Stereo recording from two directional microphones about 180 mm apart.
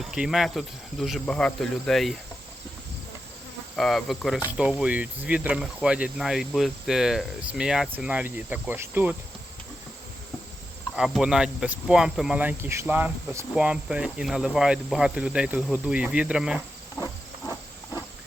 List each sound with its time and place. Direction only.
0.0 s speech: centre (ahead or behind)
3.8 s speech: centre (ahead or behind)
10.9 s speech: centre (ahead or behind)
17.0 s a sound: 20° left (ahead or behind)